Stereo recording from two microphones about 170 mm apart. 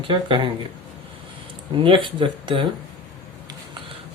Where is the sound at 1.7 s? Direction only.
30° right (ahead or behind).